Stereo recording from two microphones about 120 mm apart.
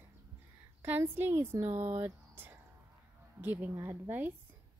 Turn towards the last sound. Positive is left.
turn(degrees=-15)  # may be behind; listen again after turning